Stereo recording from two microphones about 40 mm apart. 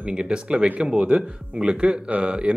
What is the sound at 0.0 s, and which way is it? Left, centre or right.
Speech, right.